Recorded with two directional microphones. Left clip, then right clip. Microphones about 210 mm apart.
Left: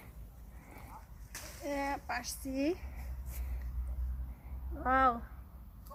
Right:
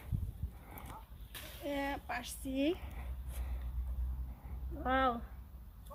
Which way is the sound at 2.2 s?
20° right (ahead or behind).